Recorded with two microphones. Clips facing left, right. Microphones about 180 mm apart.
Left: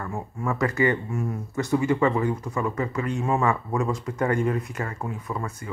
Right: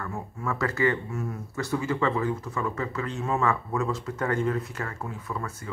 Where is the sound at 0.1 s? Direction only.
15° left (ahead or behind).